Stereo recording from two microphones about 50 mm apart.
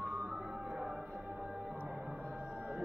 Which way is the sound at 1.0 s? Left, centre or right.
Right.